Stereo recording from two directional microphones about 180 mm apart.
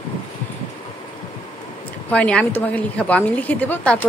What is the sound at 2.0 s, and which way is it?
A woman's voice, 10° left (ahead or behind).